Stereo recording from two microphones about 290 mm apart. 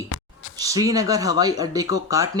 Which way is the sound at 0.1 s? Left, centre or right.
Left.